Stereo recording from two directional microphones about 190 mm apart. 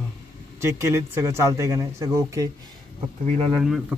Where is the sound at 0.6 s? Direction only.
15° right (ahead or behind).